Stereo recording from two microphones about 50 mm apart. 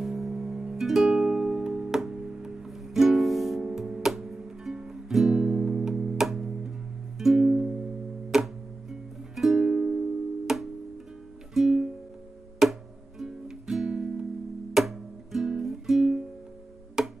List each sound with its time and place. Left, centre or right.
0.0 s music: centre
3.6 s music: centre
5.4 s music: right